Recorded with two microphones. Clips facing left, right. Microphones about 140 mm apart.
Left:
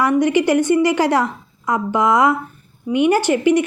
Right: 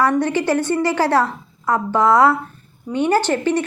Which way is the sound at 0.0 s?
15° left (ahead or behind).